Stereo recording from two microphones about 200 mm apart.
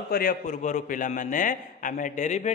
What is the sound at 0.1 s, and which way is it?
A man's voice, 45° left (ahead or behind).